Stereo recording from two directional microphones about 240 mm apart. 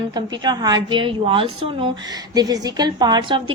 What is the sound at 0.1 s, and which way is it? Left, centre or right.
A woman's voice, centre.